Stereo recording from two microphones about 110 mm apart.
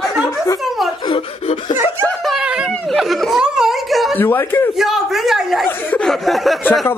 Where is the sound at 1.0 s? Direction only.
55° left (ahead or behind).